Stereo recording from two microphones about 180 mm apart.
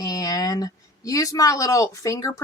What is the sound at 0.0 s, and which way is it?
Speech, 20° left (ahead or behind).